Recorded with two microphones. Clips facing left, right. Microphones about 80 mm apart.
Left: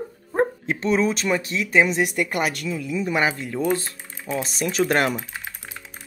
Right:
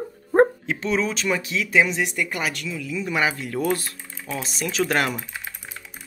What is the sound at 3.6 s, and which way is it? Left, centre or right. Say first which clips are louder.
Speech: left 2 dB; left.